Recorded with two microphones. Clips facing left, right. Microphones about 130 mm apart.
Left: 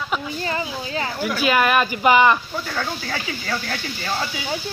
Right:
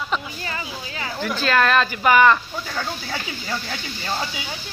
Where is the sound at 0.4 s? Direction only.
30° left (ahead or behind).